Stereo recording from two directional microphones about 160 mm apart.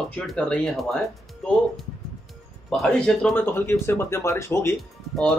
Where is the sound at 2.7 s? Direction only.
5° left (ahead or behind).